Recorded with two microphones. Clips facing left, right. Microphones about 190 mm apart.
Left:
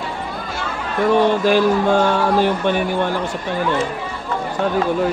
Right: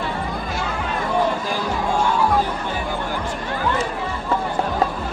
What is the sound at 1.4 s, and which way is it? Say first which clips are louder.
Speech: left 9 dB; 75° left (ahead or behind).